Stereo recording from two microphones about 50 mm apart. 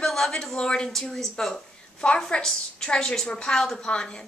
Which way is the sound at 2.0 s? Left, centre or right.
Left.